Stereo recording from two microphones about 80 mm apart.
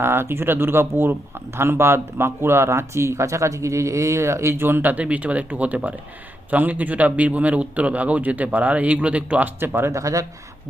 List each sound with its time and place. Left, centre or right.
0.0 s a man's voice: right
9.6 s speech: right
10.0 s speech: right